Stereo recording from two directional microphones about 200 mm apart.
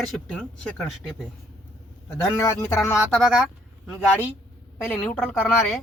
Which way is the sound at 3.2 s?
5° right (ahead or behind).